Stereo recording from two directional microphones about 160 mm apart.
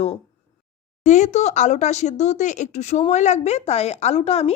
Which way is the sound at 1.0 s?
50° left (ahead or behind).